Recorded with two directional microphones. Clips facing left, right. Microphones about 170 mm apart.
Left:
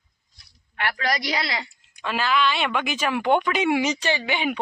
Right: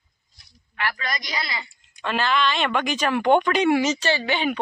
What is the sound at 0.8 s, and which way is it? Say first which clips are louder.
Speech: left 3 dB; 65° left (ahead or behind).